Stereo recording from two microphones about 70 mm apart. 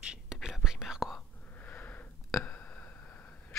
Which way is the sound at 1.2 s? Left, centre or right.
Left.